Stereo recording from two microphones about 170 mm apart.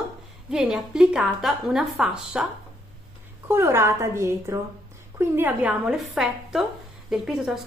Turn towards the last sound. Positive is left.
turn(degrees=0)  # may be behind; listen again after turning